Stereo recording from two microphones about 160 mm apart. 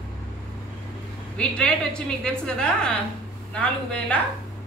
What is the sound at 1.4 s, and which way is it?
A man's voice, 5° left (ahead or behind).